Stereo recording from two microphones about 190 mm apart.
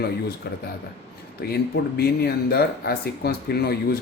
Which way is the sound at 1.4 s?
60° left (ahead or behind).